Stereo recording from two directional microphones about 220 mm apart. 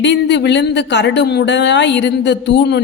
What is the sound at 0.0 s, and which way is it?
A woman's voice, 55° left (ahead or behind).